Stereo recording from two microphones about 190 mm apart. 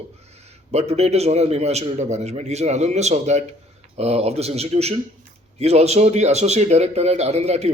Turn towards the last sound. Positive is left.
turn(degrees=-35)  # may be behind; listen again after turning